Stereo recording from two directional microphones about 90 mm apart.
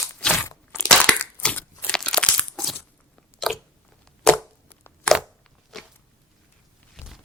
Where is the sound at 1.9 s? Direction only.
10° left (ahead or behind).